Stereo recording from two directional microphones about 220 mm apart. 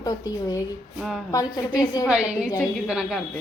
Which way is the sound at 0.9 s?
Centre (ahead or behind).